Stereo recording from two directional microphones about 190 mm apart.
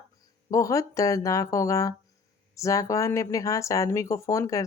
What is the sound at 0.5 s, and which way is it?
Speech, 15° left (ahead or behind).